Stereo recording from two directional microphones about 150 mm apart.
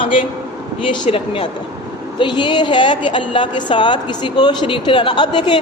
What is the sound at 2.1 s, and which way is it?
A woman's voice, 30° left (ahead or behind).